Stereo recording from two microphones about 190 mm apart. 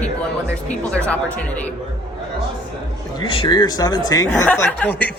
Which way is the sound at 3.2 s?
20° left (ahead or behind).